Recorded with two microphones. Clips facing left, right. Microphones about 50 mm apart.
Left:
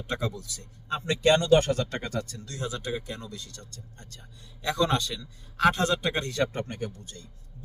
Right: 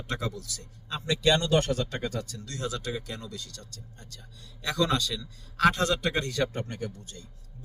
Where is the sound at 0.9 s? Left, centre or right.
Left.